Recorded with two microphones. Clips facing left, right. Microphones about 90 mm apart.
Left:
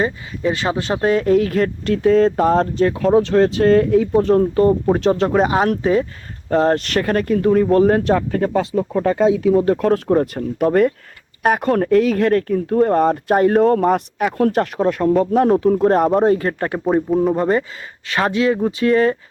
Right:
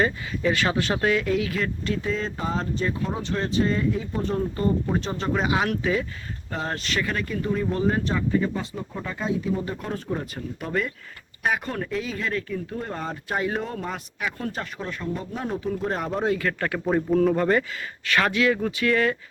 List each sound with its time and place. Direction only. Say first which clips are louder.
0.0 s speech: left 4 dB; 30° left (ahead or behind); by 4.7 s 75° left (ahead or behind)
4.9 s speech: left 11 dB; 90° left
5.3 s speech: left 8 dB; 45° left (ahead or behind)
6.5 s speech: left 13 dB; 55° left (ahead or behind)
15.7 s speech: left 13 dB; 50° left (ahead or behind); by 16.9 s 30° left (ahead or behind)
16.9 s a man's voice: left 4 dB; 15° left (ahead or behind)
17.3 s speech: left 4 dB; 25° left (ahead or behind)